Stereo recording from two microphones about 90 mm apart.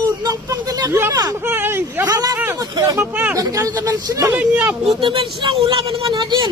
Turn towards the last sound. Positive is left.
turn(degrees=-55)  # may be behind; listen again after turning